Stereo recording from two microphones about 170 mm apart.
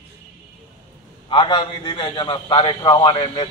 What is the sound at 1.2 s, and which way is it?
A man's voice, 30° left (ahead or behind).